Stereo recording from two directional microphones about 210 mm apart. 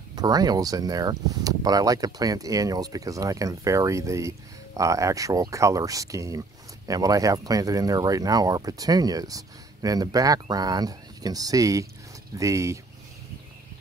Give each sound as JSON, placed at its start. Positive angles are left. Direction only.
{"t": 0.1, "sound": "speech", "side_deg": -20}